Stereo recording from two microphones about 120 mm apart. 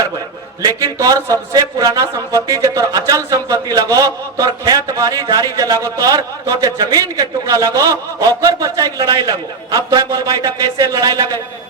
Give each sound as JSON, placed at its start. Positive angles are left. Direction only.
{"t": 0.6, "sound": "a man's voice", "side_deg": -30}